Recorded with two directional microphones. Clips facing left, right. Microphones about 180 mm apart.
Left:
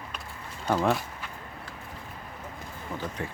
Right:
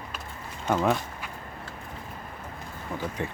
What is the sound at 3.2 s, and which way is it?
Speech, 20° right (ahead or behind).